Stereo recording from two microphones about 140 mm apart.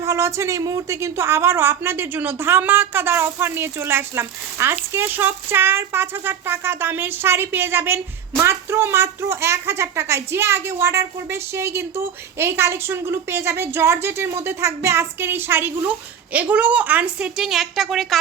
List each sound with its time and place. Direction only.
0.0 s a woman's voice: 20° right (ahead or behind); by 18.2 s centre (ahead or behind)